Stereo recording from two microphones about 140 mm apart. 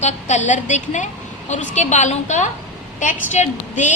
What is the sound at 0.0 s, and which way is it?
A woman's voice, 60° left (ahead or behind).